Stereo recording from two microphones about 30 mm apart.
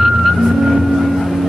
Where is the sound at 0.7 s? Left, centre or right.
Centre.